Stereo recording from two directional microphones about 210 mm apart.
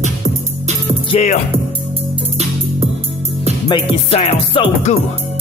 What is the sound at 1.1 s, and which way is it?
Music, 30° left (ahead or behind).